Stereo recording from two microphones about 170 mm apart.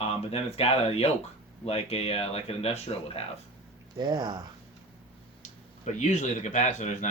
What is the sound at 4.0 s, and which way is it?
Speech, 25° right (ahead or behind).